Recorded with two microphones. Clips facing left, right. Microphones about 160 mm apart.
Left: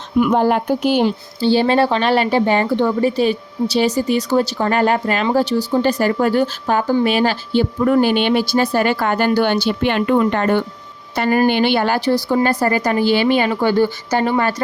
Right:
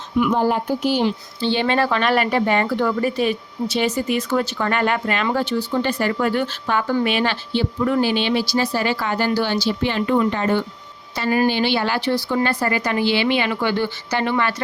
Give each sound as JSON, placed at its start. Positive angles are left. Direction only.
{"t": 0.3, "sound": "speech", "side_deg": 65}
{"t": 1.0, "sound": "speech", "side_deg": 40}